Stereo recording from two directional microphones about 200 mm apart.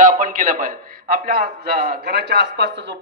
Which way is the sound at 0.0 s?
40° right (ahead or behind).